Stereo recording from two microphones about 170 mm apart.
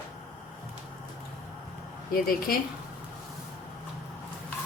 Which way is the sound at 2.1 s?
60° left (ahead or behind).